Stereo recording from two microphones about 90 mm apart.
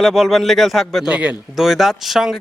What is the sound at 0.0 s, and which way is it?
Speech, centre (ahead or behind).